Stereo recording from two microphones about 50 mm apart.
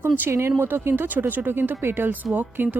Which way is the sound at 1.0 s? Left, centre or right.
Right.